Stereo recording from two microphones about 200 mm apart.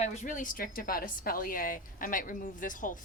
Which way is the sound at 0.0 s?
40° left (ahead or behind).